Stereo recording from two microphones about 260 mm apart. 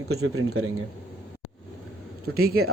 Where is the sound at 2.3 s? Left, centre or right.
Right.